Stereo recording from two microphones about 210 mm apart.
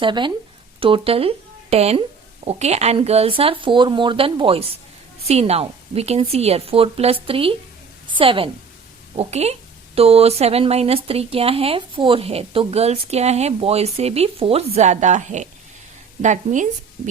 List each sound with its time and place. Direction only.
0.0 s a woman's voice: 20° right (ahead or behind)